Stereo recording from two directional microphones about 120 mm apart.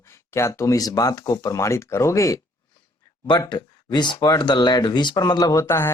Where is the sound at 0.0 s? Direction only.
25° left (ahead or behind).